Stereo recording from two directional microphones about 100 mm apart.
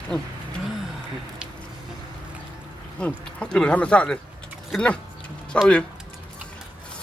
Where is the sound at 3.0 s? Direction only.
10° left (ahead or behind).